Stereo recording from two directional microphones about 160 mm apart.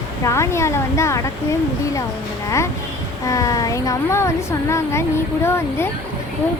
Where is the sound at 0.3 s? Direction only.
15° left (ahead or behind).